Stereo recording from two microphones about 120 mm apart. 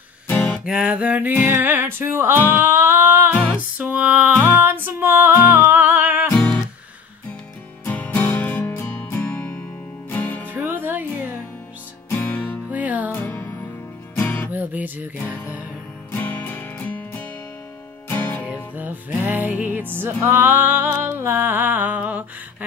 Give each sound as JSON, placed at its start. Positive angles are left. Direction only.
{"t": 0.3, "sound": "music", "side_deg": 15}
{"t": 0.7, "sound": "music", "side_deg": -5}
{"t": 6.3, "sound": "music", "side_deg": 10}
{"t": 7.8, "sound": "music", "side_deg": 15}
{"t": 10.5, "sound": "music", "side_deg": -15}
{"t": 12.1, "sound": "music", "side_deg": 15}
{"t": 12.7, "sound": "music", "side_deg": -15}
{"t": 13.1, "sound": "music", "side_deg": 15}
{"t": 14.5, "sound": "music", "side_deg": -15}
{"t": 16.1, "sound": "music", "side_deg": 15}
{"t": 18.4, "sound": "music", "side_deg": -10}